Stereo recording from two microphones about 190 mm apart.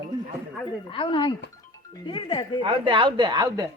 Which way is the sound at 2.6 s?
25° right (ahead or behind).